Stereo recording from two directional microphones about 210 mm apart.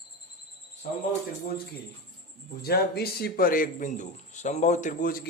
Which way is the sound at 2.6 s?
50° left (ahead or behind).